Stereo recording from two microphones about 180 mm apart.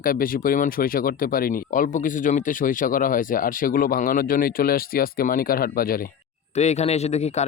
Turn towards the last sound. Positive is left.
turn(degrees=40)  # may be behind; listen again after turning